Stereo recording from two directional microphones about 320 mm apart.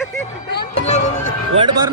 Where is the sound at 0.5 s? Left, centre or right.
Left.